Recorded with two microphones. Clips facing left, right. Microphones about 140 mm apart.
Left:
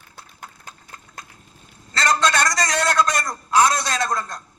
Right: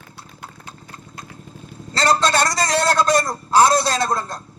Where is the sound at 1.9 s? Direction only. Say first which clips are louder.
Right 2 dB; 30° right (ahead or behind).